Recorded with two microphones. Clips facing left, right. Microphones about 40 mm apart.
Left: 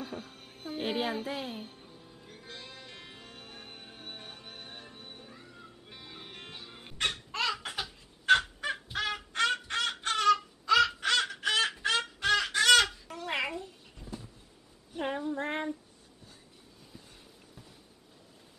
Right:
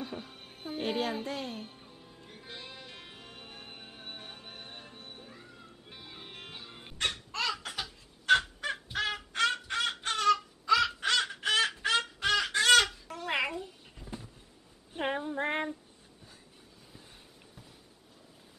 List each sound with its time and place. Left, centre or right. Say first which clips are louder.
0.0 s music: even; centre
0.7 s speech: even; centre
1.7 s music: left 1 dB; centre
7.0 s fowl: left 1 dB; centre
10.1 s a sound: left 2 dB; centre
14.9 s female singing: even; right